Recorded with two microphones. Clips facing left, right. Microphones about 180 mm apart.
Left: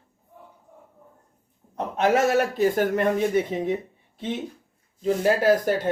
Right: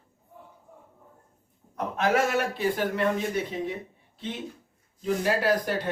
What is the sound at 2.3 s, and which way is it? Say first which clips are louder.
Speech: left 6 dB; 40° left (ahead or behind).